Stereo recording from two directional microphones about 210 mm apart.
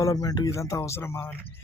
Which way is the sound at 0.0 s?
15° left (ahead or behind).